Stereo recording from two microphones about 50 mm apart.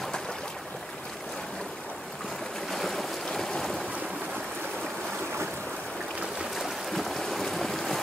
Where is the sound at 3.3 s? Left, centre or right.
Centre.